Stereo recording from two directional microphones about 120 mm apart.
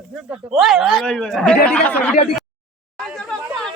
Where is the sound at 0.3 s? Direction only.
Centre (ahead or behind); by 2.1 s 15° left (ahead or behind).